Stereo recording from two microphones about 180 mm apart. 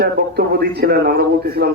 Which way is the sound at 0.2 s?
65° right (ahead or behind).